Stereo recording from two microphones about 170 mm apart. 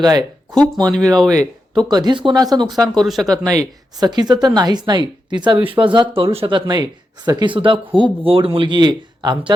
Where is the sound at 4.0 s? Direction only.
25° right (ahead or behind).